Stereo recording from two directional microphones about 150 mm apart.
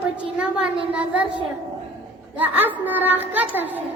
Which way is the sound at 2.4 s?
10° right (ahead or behind).